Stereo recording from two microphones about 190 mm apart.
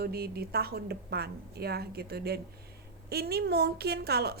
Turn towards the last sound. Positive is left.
turn(degrees=-55)  # may be behind; listen again after turning